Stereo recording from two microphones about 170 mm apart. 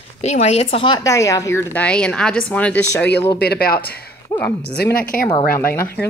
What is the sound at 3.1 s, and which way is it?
Speech, 75° left (ahead or behind).